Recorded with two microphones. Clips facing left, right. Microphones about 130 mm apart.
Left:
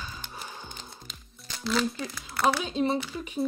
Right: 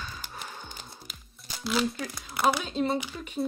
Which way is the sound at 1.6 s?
5° right (ahead or behind).